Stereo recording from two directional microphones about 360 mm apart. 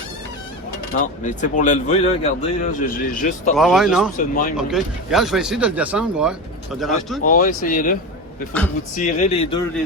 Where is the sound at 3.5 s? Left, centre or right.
Centre.